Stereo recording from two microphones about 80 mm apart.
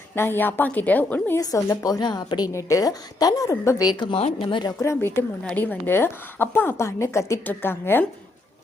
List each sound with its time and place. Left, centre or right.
0.2 s a woman's voice: left
1.4 s speech: left
2.0 s a woman's voice: left
2.5 s a woman's voice: left
4.0 s speech: left
4.8 s a woman's voice: left